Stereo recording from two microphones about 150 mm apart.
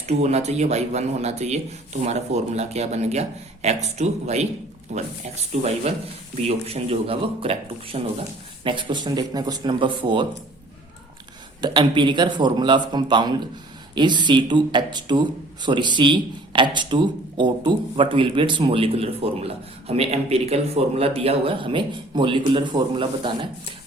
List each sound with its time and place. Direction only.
0.0 s speech: 45° right (ahead or behind)
6.3 s a man's voice: 45° right (ahead or behind)
8.6 s a man's voice: 35° right (ahead or behind)
11.6 s a man's voice: 30° right (ahead or behind)